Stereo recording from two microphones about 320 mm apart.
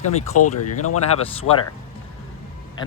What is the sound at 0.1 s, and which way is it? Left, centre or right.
Speech, left.